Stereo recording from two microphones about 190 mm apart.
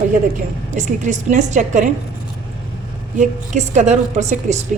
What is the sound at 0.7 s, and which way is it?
A woman's voice, 40° right (ahead or behind).